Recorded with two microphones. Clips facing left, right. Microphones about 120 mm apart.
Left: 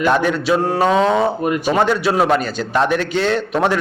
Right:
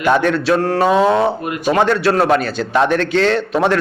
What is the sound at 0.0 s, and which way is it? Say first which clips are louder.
A man's voice: right 2 dB; centre (ahead or behind).